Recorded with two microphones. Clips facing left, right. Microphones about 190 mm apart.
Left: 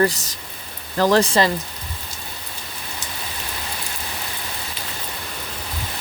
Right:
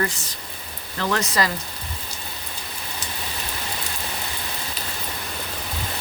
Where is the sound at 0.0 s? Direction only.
40° left (ahead or behind).